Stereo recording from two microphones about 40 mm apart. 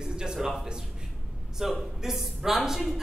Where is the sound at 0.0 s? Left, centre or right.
Centre.